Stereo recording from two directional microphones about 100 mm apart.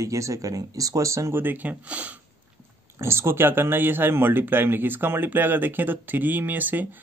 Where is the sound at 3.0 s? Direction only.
25° right (ahead or behind).